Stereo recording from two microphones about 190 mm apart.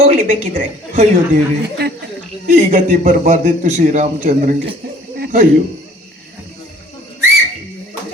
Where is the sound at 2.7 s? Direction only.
45° right (ahead or behind).